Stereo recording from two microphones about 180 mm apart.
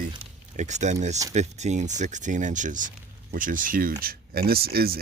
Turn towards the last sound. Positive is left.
turn(degrees=-55)  # may be behind; listen again after turning